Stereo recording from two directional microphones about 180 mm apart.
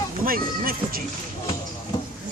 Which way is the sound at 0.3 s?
55° right (ahead or behind).